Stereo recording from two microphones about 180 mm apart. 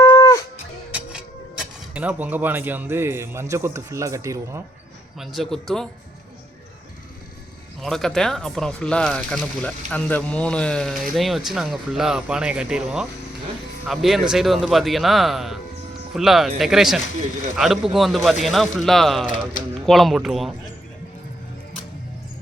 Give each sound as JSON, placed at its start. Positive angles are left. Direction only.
{"t": 0.0, "sound": "music", "side_deg": 15}
{"t": 0.9, "sound": "music", "side_deg": -10}
{"t": 1.9, "sound": "speech", "side_deg": -10}
{"t": 5.2, "sound": "speech", "side_deg": 0}
{"t": 7.8, "sound": "speech", "side_deg": 0}